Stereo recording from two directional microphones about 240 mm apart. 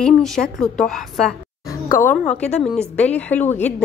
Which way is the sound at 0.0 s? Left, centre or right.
Centre.